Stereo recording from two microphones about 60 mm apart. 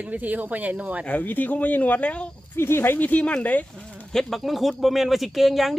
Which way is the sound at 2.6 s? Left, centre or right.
Left.